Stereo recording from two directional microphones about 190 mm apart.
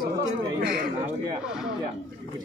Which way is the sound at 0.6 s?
55° right (ahead or behind).